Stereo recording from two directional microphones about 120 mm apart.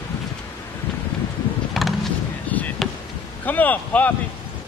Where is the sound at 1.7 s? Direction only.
Centre (ahead or behind).